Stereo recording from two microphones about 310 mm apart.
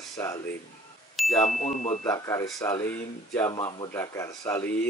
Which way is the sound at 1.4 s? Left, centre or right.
Left.